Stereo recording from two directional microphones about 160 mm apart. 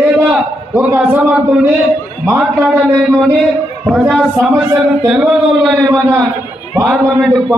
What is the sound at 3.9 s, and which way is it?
Speech, 5° right (ahead or behind).